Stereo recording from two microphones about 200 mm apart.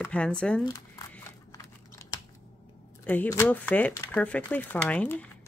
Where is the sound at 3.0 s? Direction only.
10° left (ahead or behind).